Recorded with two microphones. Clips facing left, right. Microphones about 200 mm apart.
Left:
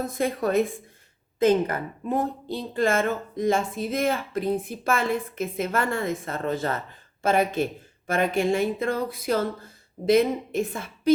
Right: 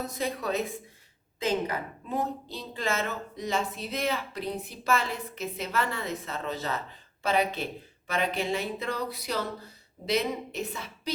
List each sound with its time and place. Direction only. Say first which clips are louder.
0.0 s speech: left 6 dB; 50° left (ahead or behind)